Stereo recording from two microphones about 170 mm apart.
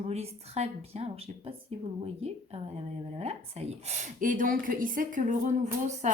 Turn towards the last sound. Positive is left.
turn(degrees=-45)  # may be behind; listen again after turning